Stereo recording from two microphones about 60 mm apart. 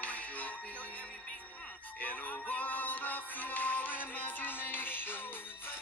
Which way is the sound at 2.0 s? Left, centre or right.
Left.